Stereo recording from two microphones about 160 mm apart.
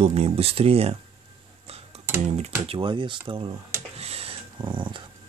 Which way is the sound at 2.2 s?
40° right (ahead or behind).